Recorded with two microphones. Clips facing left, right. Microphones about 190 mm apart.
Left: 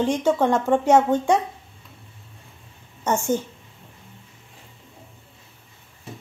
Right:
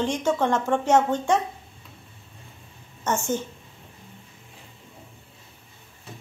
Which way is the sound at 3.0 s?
10° left (ahead or behind).